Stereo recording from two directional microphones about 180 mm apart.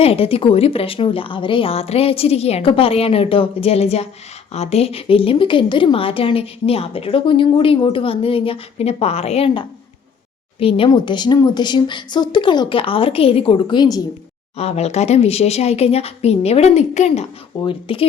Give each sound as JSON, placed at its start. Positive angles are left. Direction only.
{"t": 0.0, "sound": "a woman's voice", "side_deg": 30}
{"t": 14.5, "sound": "a woman's voice", "side_deg": 35}